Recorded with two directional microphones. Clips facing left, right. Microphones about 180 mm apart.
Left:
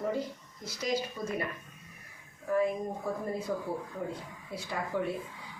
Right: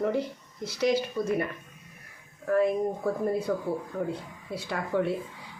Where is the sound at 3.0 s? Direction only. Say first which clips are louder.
Right 5 dB; 65° right (ahead or behind).